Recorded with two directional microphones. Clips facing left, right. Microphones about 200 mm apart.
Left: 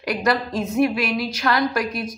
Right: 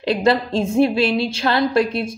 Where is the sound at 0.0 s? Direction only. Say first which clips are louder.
Right 5 dB; 25° right (ahead or behind).